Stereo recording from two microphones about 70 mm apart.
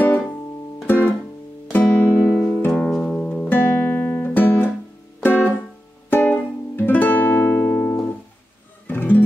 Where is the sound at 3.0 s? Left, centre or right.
Centre.